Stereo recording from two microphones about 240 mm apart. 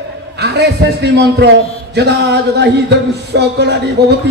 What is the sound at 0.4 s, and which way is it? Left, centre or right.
A man's voice, right.